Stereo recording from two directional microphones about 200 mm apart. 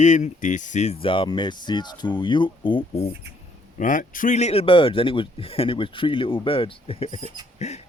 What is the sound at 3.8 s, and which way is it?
A man's voice, 40° left (ahead or behind).